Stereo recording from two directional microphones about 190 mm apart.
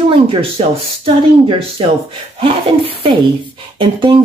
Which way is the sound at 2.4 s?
30° right (ahead or behind).